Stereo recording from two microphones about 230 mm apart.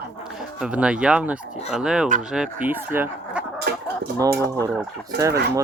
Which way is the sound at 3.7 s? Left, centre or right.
Right.